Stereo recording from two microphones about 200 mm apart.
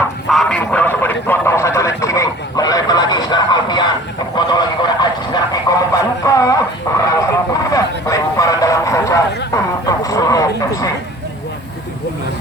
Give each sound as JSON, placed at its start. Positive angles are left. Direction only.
{"t": 0.3, "sound": "a sound", "side_deg": 5}
{"t": 6.9, "sound": "radio", "side_deg": 15}
{"t": 7.2, "sound": "vehicle", "side_deg": 15}